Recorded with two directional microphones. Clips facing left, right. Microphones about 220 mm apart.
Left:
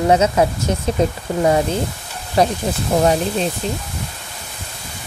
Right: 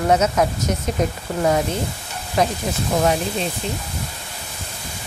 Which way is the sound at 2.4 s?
35° left (ahead or behind).